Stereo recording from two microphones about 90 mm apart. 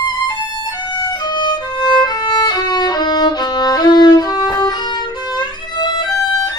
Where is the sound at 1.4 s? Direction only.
55° left (ahead or behind).